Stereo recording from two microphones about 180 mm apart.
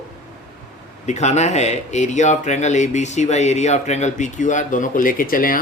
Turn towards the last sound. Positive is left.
turn(degrees=50)  # may be behind; listen again after turning